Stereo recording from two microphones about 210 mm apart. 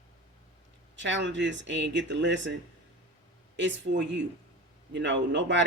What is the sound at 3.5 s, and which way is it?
Speech, 60° right (ahead or behind).